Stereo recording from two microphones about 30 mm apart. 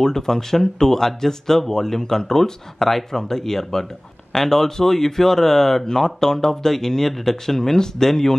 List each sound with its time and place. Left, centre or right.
0.0 s speech: centre